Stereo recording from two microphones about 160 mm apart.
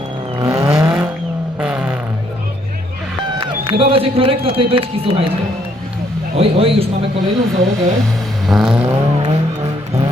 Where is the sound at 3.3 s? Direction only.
35° right (ahead or behind).